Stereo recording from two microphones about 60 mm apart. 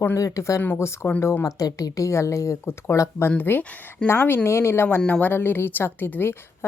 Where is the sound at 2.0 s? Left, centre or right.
Left.